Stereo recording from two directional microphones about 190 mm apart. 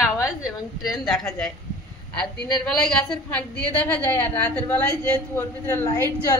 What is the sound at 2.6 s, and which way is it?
A woman's voice, 5° left (ahead or behind).